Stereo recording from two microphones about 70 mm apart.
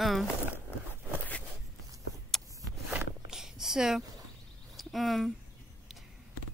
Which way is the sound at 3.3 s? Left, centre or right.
Centre.